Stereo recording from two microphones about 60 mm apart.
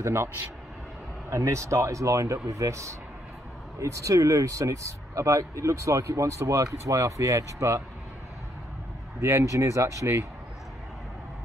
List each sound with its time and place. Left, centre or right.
0.0 s speech: right
1.3 s speech: right
9.2 s speech: right